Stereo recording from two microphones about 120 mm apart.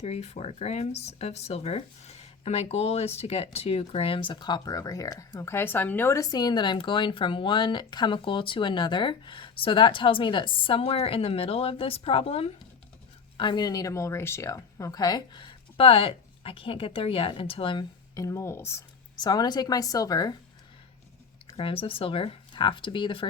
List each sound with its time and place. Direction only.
0.0 s speech: 60° left (ahead or behind)
13.3 s speech: 40° left (ahead or behind)
18.1 s speech: 25° left (ahead or behind)
19.1 s speech: 35° left (ahead or behind)
21.5 s speech: 50° left (ahead or behind)